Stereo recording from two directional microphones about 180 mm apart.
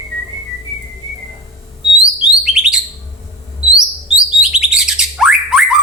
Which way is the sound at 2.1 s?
5° right (ahead or behind).